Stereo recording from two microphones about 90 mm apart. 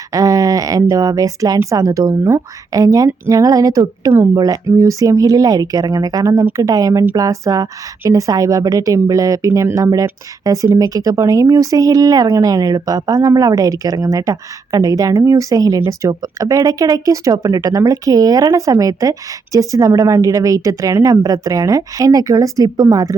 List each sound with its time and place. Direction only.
0.1 s a woman's voice: 40° right (ahead or behind)